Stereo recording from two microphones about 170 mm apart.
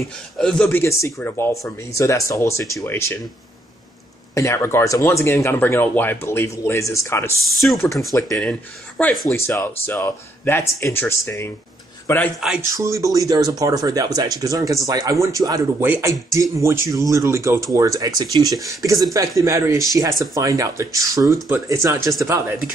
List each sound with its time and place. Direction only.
0.4 s speech: 5° left (ahead or behind)
0.7 s speech: 15° left (ahead or behind)
4.4 s speech: 15° left (ahead or behind)
8.4 s speech: 5° left (ahead or behind)
9.9 s speech: 15° left (ahead or behind)
12.7 s speech: 20° right (ahead or behind)